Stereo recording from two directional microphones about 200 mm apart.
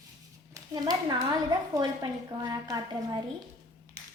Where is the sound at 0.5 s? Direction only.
20° right (ahead or behind).